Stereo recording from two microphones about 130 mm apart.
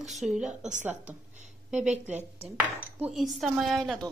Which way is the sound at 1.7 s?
5° right (ahead or behind).